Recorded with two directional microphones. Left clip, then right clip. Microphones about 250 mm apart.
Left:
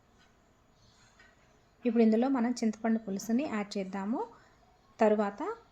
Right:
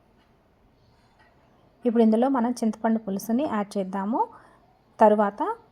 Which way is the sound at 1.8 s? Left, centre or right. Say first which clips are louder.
Right 6 dB; centre.